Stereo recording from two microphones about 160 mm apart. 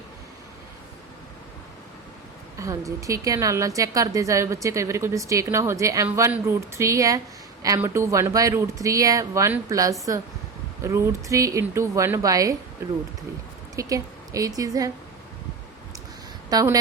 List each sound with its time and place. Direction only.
2.6 s a woman's voice: 20° right (ahead or behind)
13.7 s a woman's voice: 20° right (ahead or behind)
16.5 s a woman's voice: 25° right (ahead or behind)